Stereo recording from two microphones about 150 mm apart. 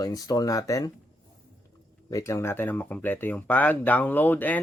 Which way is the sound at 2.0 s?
20° left (ahead or behind).